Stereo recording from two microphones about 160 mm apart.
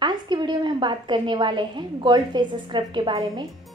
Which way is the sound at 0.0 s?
30° right (ahead or behind).